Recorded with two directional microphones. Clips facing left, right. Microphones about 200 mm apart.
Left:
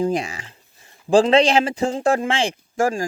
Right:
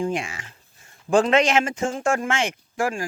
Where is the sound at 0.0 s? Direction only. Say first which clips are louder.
Left 4 dB; 35° left (ahead or behind).